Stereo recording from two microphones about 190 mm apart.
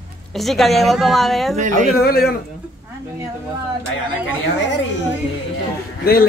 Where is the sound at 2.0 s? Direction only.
55° left (ahead or behind).